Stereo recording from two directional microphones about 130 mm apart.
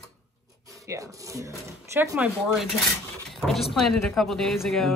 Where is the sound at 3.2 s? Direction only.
Centre (ahead or behind).